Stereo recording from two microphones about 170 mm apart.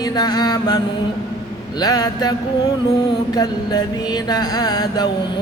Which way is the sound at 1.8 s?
25° left (ahead or behind).